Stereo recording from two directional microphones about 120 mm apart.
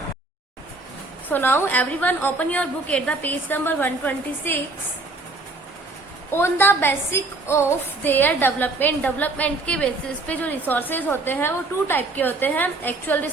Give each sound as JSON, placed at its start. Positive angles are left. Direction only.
{"t": 1.3, "sound": "a woman's voice", "side_deg": 15}
{"t": 6.3, "sound": "a woman's voice", "side_deg": 20}